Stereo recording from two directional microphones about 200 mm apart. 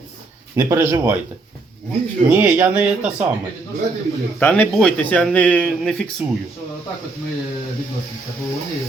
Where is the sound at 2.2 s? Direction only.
10° right (ahead or behind).